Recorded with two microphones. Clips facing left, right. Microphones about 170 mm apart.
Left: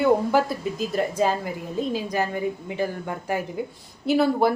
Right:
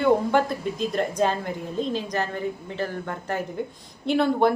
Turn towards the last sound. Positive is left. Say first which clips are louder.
# left 1 dB
turn(degrees=5)  # may be behind; listen again after turning